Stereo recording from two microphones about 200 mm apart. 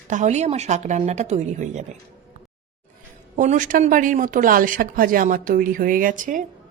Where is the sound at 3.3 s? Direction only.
40° right (ahead or behind).